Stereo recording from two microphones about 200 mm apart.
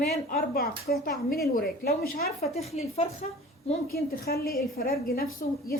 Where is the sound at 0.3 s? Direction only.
45° left (ahead or behind).